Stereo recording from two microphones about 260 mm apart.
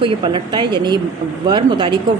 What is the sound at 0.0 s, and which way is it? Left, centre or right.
A woman's voice, centre.